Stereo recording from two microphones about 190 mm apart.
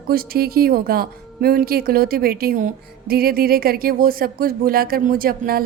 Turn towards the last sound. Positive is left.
turn(degrees=-50)  # may be behind; listen again after turning